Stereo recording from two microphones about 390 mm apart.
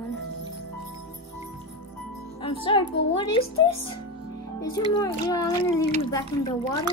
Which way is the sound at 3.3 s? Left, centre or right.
Centre.